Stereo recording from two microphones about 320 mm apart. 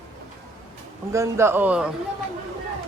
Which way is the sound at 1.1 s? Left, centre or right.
Centre.